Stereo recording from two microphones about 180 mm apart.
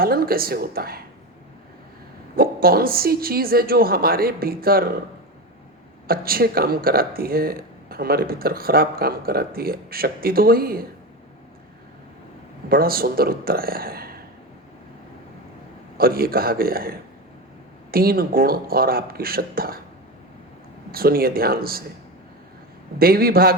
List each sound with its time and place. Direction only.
0.0 s speech: 55° right (ahead or behind)
2.3 s speech: 55° right (ahead or behind)
6.1 s speech: 55° right (ahead or behind)
12.6 s speech: 55° right (ahead or behind)
16.0 s speech: 55° right (ahead or behind)
17.9 s speech: 55° right (ahead or behind)
20.9 s speech: 55° right (ahead or behind)
23.0 s speech: 55° right (ahead or behind)